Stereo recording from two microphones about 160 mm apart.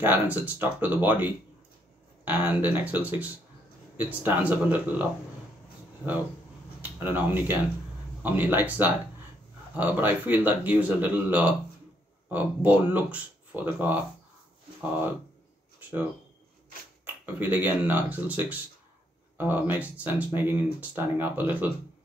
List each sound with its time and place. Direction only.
0.0 s speech: 10° right (ahead or behind)
6.8 s speech: 10° right (ahead or behind)
17.0 s speech: 10° right (ahead or behind)